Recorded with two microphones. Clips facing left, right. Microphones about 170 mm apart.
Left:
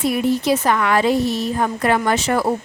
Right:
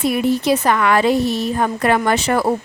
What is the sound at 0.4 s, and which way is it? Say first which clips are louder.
A woman's voice: right 2 dB; 65° right (ahead or behind).